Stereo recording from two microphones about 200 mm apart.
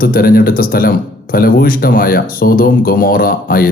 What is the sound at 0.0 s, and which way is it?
A man's voice, 45° left (ahead or behind).